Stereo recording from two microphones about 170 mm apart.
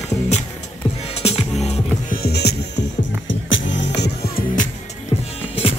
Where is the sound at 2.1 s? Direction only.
70° left (ahead or behind).